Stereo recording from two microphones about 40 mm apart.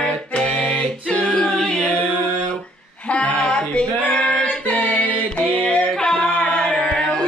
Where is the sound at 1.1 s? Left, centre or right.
Left.